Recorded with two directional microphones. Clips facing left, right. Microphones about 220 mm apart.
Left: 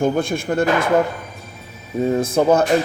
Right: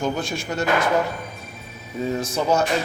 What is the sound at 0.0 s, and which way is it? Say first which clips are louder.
Speech: left 6 dB; 55° left (ahead or behind).